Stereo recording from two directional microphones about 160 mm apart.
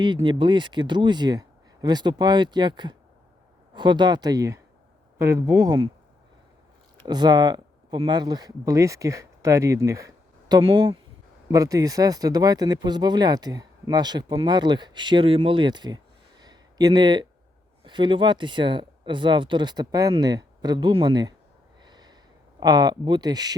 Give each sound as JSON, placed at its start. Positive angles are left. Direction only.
{"t": 0.0, "sound": "speech", "side_deg": -30}
{"t": 7.0, "sound": "speech", "side_deg": -25}
{"t": 10.5, "sound": "speech", "side_deg": -30}
{"t": 16.4, "sound": "a sound", "side_deg": -25}
{"t": 17.8, "sound": "speech", "side_deg": -30}
{"t": 21.8, "sound": "snort", "side_deg": -25}
{"t": 22.6, "sound": "speech", "side_deg": -25}